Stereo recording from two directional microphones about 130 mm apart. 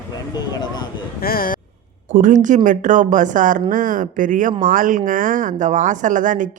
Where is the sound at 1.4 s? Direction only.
90° left.